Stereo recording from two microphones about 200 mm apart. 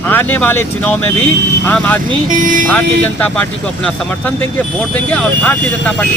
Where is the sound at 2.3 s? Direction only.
40° right (ahead or behind).